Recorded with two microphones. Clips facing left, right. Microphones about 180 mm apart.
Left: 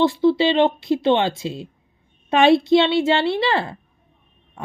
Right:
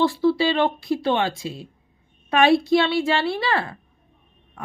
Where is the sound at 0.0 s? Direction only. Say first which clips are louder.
Left 3 dB; 20° left (ahead or behind).